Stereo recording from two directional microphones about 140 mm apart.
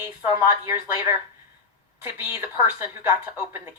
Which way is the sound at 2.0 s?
15° right (ahead or behind).